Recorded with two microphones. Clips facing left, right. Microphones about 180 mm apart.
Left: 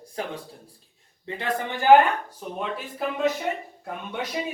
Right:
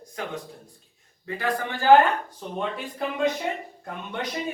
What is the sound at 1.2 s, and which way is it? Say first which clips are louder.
Speech: right 1 dB; 25° left (ahead or behind).